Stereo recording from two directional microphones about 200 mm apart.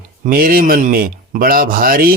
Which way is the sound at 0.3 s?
45° right (ahead or behind).